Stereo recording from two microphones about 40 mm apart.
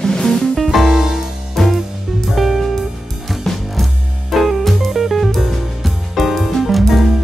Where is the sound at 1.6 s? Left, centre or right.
Centre.